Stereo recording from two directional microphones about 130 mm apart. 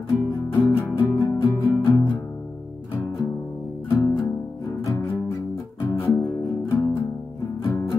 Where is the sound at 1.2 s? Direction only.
35° left (ahead or behind).